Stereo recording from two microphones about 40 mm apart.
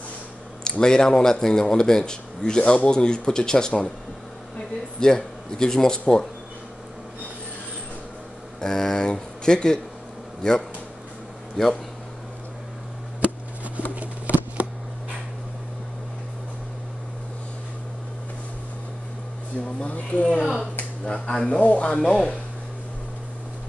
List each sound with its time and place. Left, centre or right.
0.7 s speech: centre
8.5 s speech: centre
11.6 s speech: centre
14.3 s a sound: left
19.6 s a sound: left
21.5 s speech: left
22.0 s speech: centre